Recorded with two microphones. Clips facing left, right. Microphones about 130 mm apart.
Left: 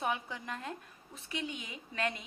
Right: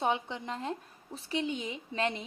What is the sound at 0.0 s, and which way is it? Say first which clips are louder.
A woman's voice: right 5 dB; 25° right (ahead or behind).